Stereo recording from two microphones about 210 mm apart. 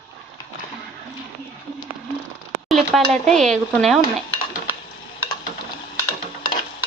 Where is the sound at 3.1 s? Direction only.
Centre (ahead or behind).